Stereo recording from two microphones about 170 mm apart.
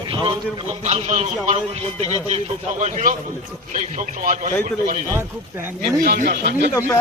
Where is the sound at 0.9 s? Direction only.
40° right (ahead or behind).